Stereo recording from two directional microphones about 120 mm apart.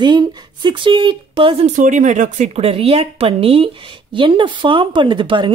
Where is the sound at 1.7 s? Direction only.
90° right.